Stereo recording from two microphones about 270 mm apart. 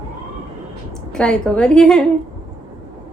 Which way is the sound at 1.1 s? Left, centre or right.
Centre.